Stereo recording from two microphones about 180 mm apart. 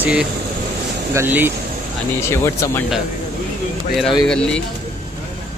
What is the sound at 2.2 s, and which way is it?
Speech, 15° left (ahead or behind).